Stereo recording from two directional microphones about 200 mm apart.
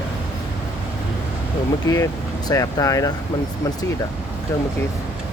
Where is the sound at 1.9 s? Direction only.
20° left (ahead or behind).